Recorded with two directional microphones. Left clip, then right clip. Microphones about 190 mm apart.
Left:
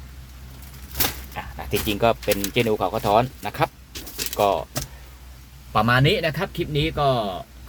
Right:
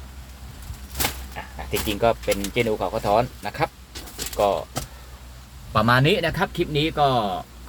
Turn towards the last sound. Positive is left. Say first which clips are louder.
# right 1 dB
turn(degrees=0)  # may be behind; listen again after turning